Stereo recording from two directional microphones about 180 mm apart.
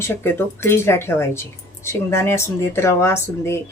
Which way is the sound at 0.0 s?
15° left (ahead or behind).